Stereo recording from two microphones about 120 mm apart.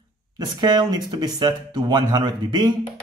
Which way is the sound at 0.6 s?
35° right (ahead or behind).